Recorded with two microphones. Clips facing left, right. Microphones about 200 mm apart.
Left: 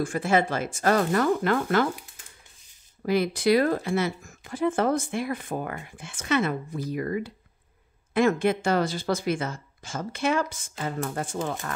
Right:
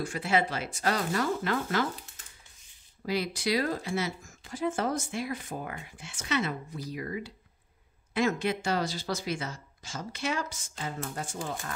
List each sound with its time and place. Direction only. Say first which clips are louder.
0.0 s speech: left 5 dB; 50° left (ahead or behind)
3.1 s speech: left 8 dB; 55° left (ahead or behind)